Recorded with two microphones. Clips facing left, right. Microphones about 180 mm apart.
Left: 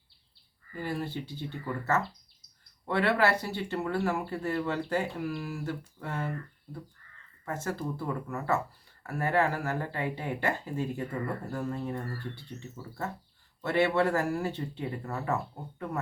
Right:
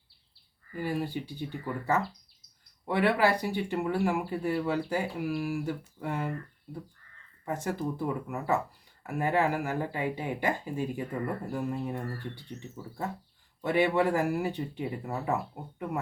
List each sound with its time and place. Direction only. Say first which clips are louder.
0.8 s speech: right 2 dB; 10° right (ahead or behind)
7.4 s speech: right 2 dB; 15° right (ahead or behind)
13.6 s speech: right 1 dB; 15° right (ahead or behind)